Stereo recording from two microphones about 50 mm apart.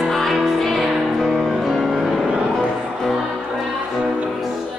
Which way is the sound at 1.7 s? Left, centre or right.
Centre.